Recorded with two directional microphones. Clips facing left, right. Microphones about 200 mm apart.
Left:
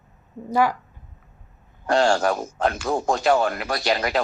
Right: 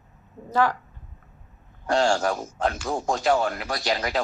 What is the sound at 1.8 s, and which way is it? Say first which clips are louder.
A man's voice: left 3 dB; 65° left (ahead or behind).